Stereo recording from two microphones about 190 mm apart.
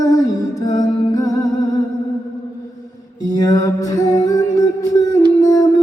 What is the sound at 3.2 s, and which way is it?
Music, 20° left (ahead or behind).